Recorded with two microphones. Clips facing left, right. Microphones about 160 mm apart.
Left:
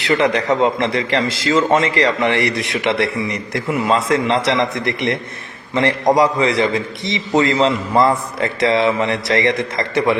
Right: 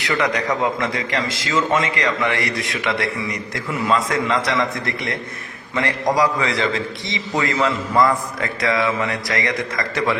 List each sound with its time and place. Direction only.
0.0 s a man's voice: 30° left (ahead or behind)